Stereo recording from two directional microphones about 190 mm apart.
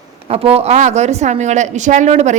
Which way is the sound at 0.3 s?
30° right (ahead or behind).